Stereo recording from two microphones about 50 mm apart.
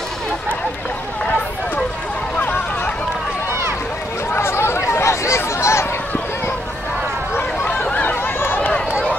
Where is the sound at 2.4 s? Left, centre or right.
Left.